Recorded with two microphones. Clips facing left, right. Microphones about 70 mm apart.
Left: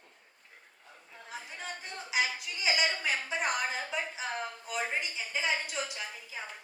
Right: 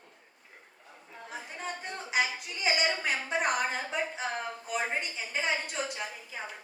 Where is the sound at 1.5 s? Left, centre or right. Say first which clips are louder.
Right 5 dB; right.